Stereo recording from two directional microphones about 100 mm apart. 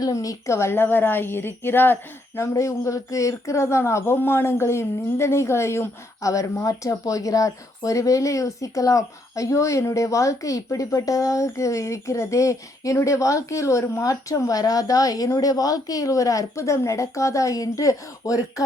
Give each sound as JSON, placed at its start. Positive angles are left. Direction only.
{"t": 0.0, "sound": "a woman's voice", "side_deg": 35}